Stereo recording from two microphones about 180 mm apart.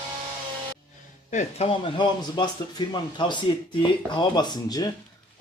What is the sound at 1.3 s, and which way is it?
Speech, 40° left (ahead or behind).